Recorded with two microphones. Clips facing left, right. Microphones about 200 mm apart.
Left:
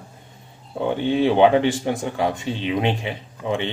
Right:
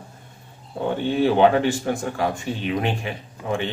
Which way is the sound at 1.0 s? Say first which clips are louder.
Left 1 dB; 20° left (ahead or behind).